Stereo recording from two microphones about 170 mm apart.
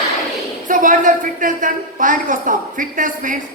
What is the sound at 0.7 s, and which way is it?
A woman's voice, 50° right (ahead or behind).